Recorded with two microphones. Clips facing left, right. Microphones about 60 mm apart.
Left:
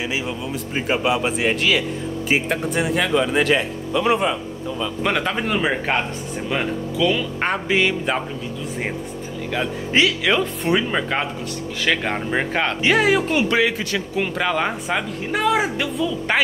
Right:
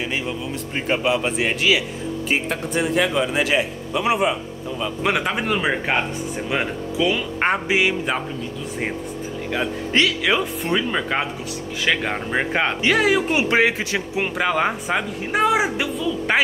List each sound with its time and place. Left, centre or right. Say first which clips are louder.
0.7 s speech: even; centre
6.5 s speech: left 1 dB; centre
9.9 s speech: left 1 dB; centre
12.8 s speech: left 2 dB; centre
13.3 s a man's voice: even; centre
13.6 s a man's voice: right 1 dB; right
14.1 s speech: even; centre